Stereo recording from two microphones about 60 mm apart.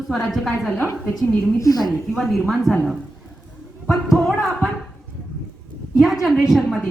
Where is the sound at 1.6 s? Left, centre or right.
Left.